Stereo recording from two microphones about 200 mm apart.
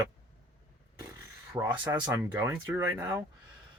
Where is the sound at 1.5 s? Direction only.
10° right (ahead or behind).